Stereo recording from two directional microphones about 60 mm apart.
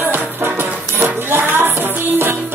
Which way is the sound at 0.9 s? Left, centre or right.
Right.